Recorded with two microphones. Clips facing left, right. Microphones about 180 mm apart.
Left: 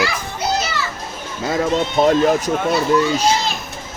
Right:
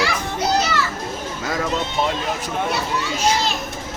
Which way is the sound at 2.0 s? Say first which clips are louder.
Left 8 dB; 40° left (ahead or behind).